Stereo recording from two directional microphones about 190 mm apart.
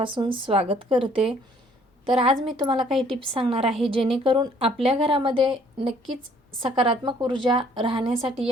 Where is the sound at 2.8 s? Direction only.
Centre (ahead or behind).